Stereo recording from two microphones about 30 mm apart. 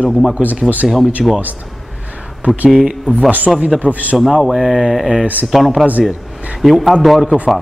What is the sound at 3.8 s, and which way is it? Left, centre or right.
Speech, right.